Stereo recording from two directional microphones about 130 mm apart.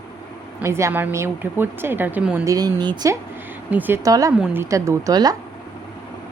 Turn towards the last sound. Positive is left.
turn(degrees=-30)  # may be behind; listen again after turning